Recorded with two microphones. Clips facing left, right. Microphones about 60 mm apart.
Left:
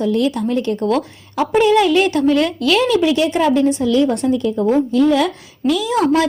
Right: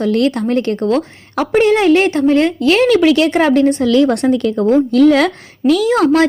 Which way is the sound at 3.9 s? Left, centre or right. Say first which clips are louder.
Right 3 dB; right.